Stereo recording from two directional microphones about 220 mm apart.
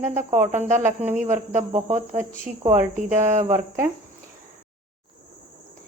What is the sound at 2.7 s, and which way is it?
Speech, 35° right (ahead or behind).